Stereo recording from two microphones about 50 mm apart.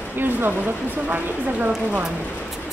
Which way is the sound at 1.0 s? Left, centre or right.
Right.